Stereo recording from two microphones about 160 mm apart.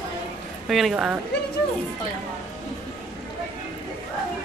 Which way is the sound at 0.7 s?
Centre (ahead or behind).